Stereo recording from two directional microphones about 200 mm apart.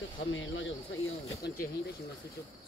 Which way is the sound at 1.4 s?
55° left (ahead or behind).